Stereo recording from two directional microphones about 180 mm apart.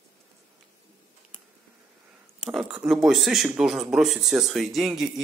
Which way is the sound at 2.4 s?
5° right (ahead or behind).